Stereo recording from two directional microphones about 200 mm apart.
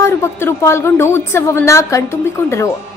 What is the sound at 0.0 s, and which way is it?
A woman's voice, 15° left (ahead or behind).